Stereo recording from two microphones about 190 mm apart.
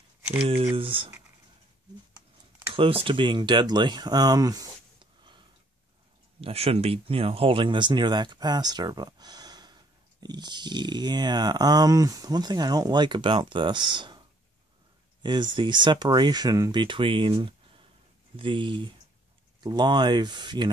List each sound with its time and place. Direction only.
0.4 s speech: 30° right (ahead or behind)
2.7 s speech: 30° right (ahead or behind)
6.4 s speech: 30° right (ahead or behind)
15.5 s speech: 25° right (ahead or behind)